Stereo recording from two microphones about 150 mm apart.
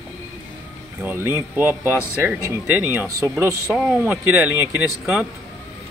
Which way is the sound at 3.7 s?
5° right (ahead or behind).